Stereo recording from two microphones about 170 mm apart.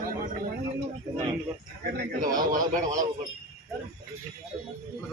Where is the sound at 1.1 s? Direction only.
30° right (ahead or behind).